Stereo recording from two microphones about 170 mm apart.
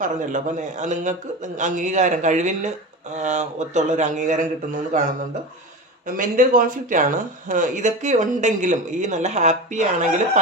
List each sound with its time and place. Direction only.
0.0 s speech: 50° right (ahead or behind)
6.1 s speech: 50° right (ahead or behind)